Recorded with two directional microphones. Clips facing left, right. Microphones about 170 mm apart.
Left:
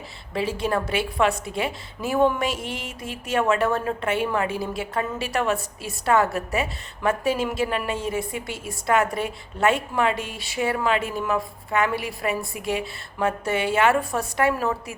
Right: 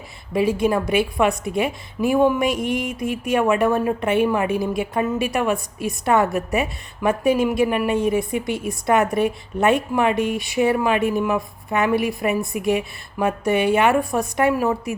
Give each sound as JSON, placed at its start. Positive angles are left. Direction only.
{"t": 0.3, "sound": "a woman's voice", "side_deg": -15}